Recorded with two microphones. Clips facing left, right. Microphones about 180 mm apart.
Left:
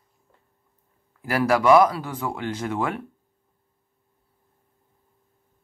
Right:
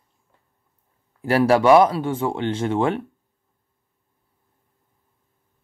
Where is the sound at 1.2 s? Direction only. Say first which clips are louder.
Right 5 dB; 25° right (ahead or behind).